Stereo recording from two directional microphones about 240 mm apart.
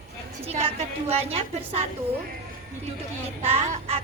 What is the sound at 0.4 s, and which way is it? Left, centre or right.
A woman's voice, right.